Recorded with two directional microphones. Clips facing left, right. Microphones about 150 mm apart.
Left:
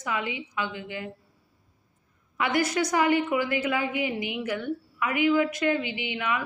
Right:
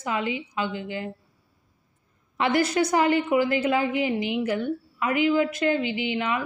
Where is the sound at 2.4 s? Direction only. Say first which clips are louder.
Right 3 dB; 25° right (ahead or behind).